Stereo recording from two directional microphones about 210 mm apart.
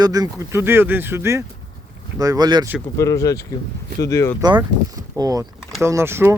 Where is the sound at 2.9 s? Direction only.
15° left (ahead or behind).